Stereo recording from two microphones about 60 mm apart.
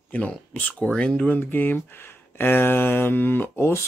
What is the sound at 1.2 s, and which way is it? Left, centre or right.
A man's voice, left.